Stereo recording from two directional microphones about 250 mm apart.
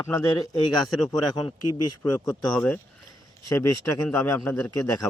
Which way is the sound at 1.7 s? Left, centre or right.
Left.